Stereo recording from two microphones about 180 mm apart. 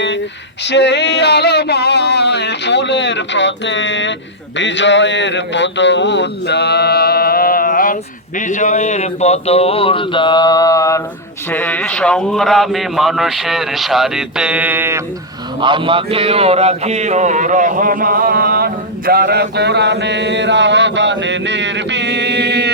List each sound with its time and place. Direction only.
0.6 s a sound: 75° left (ahead or behind); by 4.1 s 90° left
4.5 s a man's voice: 85° left; by 15.0 s 10° right (ahead or behind)
15.6 s speech: 30° right (ahead or behind); by 22.7 s 70° right (ahead or behind)